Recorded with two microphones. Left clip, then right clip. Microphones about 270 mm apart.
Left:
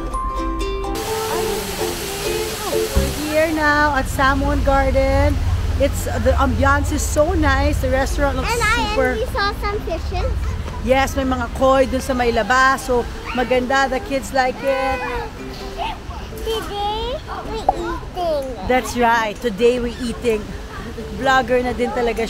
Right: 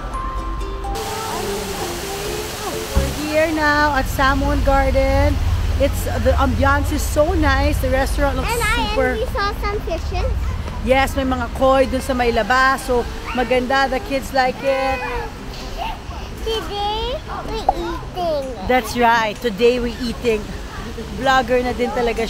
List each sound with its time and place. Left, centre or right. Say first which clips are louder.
0.9 s music: left 1 dB; centre
5.8 s speech: even; centre
16.4 s a child's voice: even; centre